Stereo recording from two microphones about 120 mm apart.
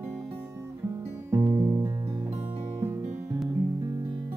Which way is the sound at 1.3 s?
20° right (ahead or behind).